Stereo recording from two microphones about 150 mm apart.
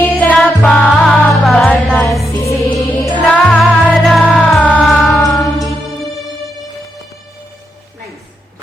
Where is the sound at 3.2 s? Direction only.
5° left (ahead or behind).